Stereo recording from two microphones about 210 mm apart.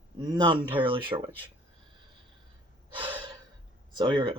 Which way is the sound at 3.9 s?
20° right (ahead or behind).